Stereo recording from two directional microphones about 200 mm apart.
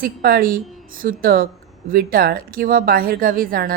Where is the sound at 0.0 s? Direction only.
45° right (ahead or behind).